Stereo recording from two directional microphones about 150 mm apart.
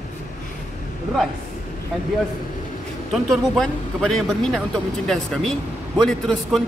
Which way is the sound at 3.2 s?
5° left (ahead or behind).